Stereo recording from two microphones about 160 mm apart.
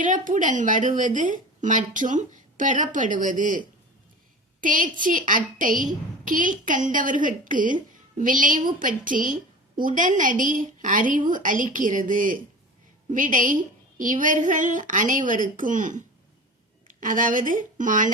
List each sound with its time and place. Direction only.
0.0 s a woman's voice: 55° right (ahead or behind)
4.6 s a woman's voice: 55° right (ahead or behind)